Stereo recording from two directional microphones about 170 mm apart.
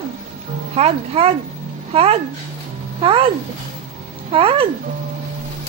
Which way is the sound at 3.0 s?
30° right (ahead or behind).